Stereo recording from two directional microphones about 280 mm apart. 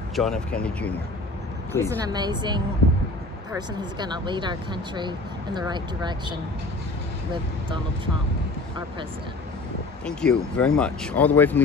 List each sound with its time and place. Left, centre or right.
0.1 s speech: centre
2.0 s speech: centre
10.0 s speech: centre